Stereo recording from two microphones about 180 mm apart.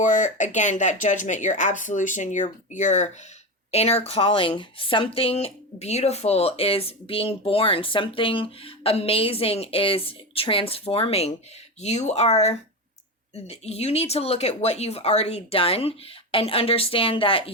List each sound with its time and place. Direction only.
0.0 s speech: 45° left (ahead or behind)